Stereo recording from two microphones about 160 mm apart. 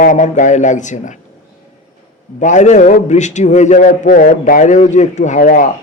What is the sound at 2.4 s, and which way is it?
A man's voice, 50° left (ahead or behind).